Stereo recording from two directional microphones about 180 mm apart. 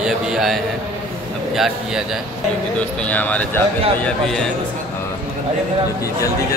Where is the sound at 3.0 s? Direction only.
10° left (ahead or behind).